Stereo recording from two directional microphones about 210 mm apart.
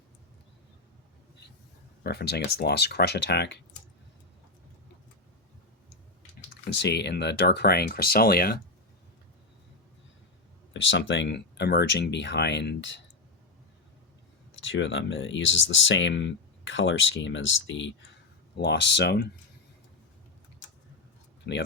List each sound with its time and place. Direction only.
2.0 s speech: 50° left (ahead or behind)
6.7 s speech: 55° left (ahead or behind)
10.8 s speech: 60° left (ahead or behind)
14.6 s speech: 60° left (ahead or behind)
21.5 s speech: 50° left (ahead or behind)